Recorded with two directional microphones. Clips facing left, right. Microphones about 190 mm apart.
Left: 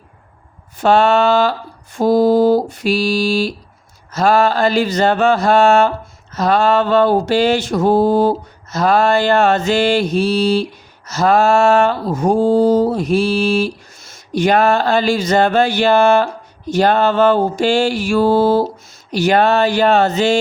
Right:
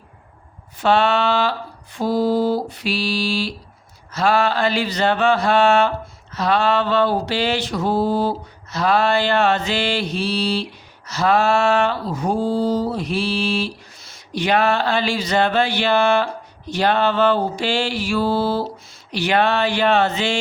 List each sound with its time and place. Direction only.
0.8 s mantra: 45° left (ahead or behind)
19.1 s speech: 40° left (ahead or behind)